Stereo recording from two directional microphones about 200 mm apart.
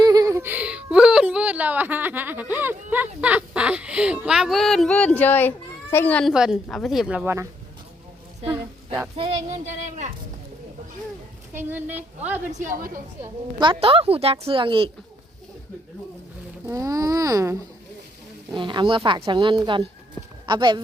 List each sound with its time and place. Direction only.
0.0 s a sound: 20° right (ahead or behind)
2.9 s speech: 10° right (ahead or behind)
9.1 s a child's voice: 30° right (ahead or behind)
11.5 s speech: 10° right (ahead or behind)
12.5 s a child's voice: 40° right (ahead or behind)
13.2 s a woman's voice: 25° right (ahead or behind)
16.6 s a woman's voice: 15° right (ahead or behind)